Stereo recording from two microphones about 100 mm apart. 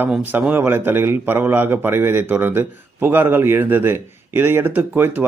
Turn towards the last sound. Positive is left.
turn(degrees=-20)  # may be behind; listen again after turning